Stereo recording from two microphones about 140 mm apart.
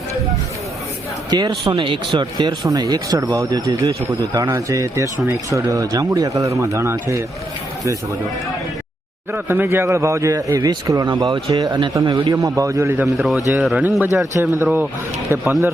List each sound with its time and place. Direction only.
1.3 s speech: 30° right (ahead or behind)
9.3 s speech: 15° right (ahead or behind)